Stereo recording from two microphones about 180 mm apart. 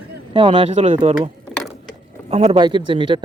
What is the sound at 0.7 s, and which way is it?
Speech, 40° right (ahead or behind).